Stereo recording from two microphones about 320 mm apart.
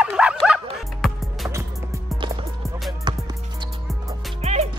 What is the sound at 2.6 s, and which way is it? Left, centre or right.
Music, centre.